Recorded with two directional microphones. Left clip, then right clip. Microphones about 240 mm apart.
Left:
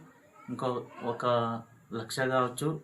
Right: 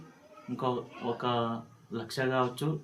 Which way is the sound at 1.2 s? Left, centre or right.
Centre.